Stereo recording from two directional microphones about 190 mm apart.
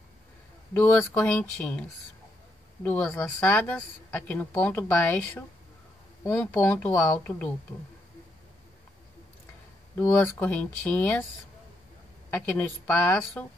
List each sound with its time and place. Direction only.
0.7 s speech: 10° left (ahead or behind)
9.9 s speech: 10° left (ahead or behind)
12.3 s speech: 10° left (ahead or behind)